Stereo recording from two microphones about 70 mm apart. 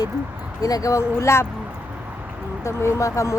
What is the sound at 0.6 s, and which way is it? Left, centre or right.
Speech, left.